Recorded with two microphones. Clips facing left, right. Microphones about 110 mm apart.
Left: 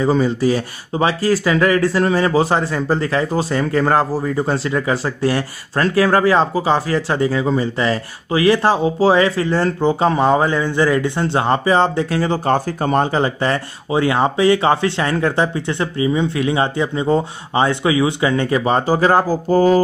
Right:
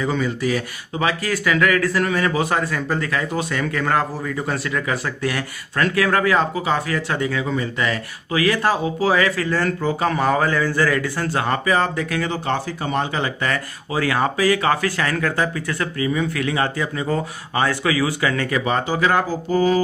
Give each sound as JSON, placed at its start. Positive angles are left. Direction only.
{"t": 0.0, "sound": "speech", "side_deg": 30}